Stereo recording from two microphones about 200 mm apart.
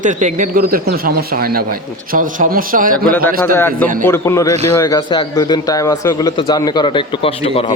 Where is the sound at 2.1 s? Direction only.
45° right (ahead or behind).